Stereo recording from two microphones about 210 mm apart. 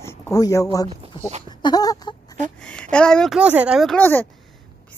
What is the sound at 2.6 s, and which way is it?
Speech, 5° left (ahead or behind).